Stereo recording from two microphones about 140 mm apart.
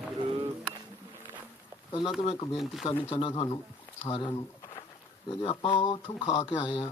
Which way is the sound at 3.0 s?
40° left (ahead or behind).